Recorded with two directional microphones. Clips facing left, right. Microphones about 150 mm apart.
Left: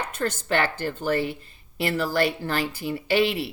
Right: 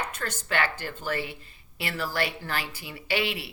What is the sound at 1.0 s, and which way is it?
Speech, 40° left (ahead or behind).